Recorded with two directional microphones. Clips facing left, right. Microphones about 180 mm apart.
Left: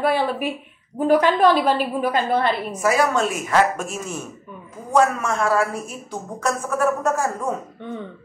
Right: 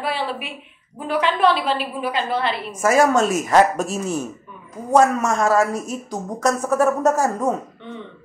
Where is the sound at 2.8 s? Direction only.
45° right (ahead or behind).